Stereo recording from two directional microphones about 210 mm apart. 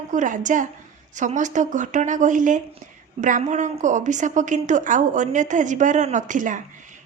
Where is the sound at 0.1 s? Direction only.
35° right (ahead or behind).